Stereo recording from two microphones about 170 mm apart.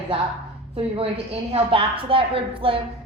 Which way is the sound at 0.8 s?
35° right (ahead or behind).